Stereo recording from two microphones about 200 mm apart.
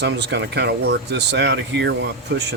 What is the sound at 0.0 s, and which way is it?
Speech, 60° right (ahead or behind).